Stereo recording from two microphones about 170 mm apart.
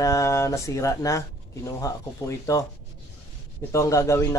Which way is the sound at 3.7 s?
15° left (ahead or behind).